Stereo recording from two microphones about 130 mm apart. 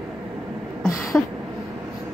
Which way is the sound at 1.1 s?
5° left (ahead or behind).